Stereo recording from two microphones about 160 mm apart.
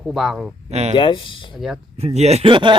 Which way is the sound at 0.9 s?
30° left (ahead or behind).